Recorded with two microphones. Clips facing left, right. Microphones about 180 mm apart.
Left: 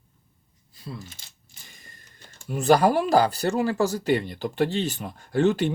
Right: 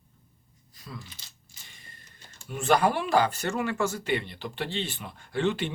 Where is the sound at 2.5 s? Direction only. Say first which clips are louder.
Left 5 dB; 40° left (ahead or behind).